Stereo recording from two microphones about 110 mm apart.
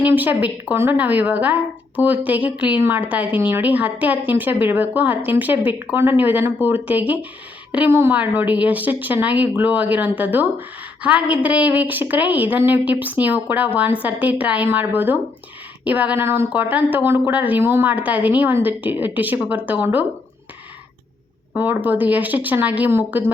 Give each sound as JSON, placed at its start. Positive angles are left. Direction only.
{"t": 0.0, "sound": "a woman's voice", "side_deg": -15}
{"t": 21.5, "sound": "a woman's voice", "side_deg": -15}